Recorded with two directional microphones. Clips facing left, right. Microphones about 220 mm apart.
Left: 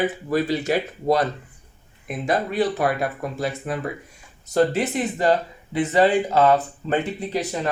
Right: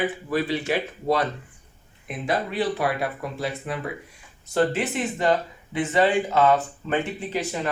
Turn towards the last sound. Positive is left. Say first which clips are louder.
# left 2 dB
turn(degrees=35)  # may be behind; listen again after turning